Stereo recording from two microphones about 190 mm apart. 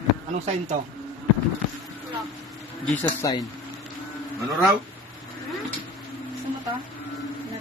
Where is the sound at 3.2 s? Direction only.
20° left (ahead or behind).